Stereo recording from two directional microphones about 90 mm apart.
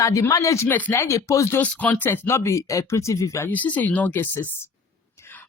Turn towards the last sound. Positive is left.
turn(degrees=20)  # may be behind; listen again after turning